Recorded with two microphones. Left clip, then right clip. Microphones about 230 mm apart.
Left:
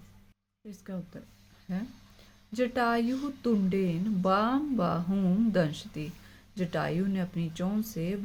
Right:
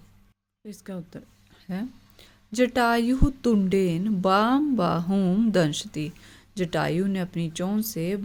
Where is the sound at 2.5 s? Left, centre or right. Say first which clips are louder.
Right 6 dB; right.